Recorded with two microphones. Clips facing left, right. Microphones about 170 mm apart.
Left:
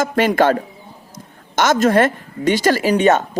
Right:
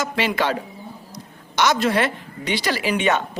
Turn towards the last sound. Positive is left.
turn(degrees=40)  # may be behind; listen again after turning